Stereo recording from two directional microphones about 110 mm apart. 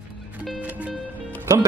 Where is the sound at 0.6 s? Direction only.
10° right (ahead or behind).